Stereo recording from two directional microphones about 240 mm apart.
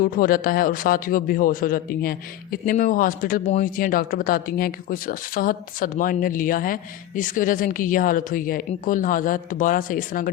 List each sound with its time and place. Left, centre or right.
0.0 s a man's voice: left